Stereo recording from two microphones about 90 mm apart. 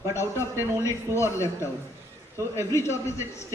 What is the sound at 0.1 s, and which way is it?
A man's voice, 30° left (ahead or behind).